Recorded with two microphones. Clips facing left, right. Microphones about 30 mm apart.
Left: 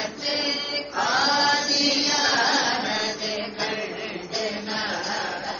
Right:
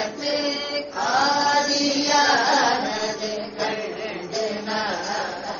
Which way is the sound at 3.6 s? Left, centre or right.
Centre.